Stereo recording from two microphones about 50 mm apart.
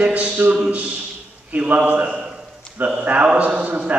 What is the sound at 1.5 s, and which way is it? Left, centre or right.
A man's voice, right.